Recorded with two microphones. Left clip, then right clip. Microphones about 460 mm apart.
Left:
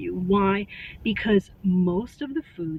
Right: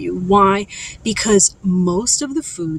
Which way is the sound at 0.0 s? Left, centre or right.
Left.